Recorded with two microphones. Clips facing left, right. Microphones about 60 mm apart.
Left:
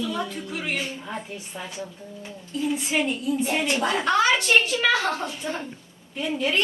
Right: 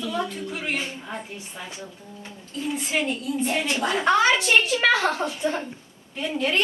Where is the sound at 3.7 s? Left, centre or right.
Left.